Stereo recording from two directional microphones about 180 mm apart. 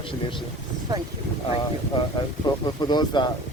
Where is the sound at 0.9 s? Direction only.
20° right (ahead or behind).